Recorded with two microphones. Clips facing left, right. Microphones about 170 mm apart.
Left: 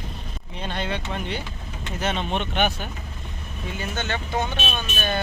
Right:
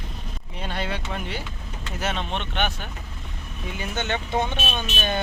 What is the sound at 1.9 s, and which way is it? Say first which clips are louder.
Speech: left 2 dB; 5° right (ahead or behind).